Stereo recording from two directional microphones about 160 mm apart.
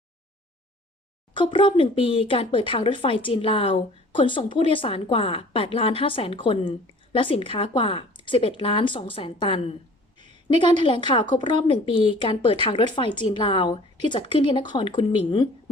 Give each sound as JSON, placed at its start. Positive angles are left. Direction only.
{"t": 1.3, "sound": "speech", "side_deg": 30}
{"t": 10.8, "sound": "a woman's voice", "side_deg": 30}